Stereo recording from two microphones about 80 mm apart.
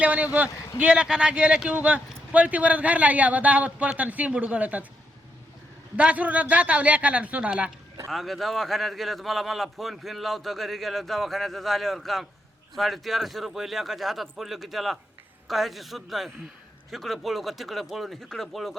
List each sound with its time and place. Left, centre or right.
0.0 s speech: centre
6.0 s speech: centre
8.1 s a man's voice: centre